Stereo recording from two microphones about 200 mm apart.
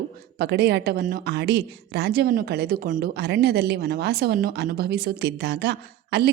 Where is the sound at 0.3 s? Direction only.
55° right (ahead or behind).